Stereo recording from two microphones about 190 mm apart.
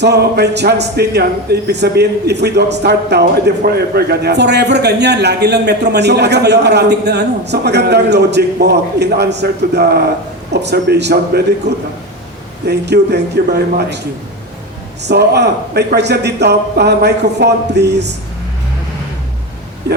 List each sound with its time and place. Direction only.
0.0 s a man's voice: 60° right (ahead or behind)
15.0 s a man's voice: 60° right (ahead or behind)